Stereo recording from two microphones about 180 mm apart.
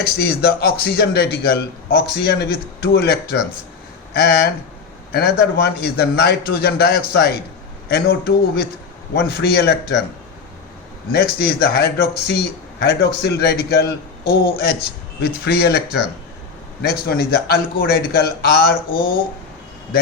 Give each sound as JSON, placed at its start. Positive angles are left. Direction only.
{"t": 0.0, "sound": "a man's voice", "side_deg": 60}
{"t": 11.1, "sound": "a man's voice", "side_deg": 60}